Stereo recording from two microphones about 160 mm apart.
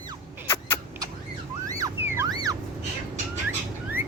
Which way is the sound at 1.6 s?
20° right (ahead or behind).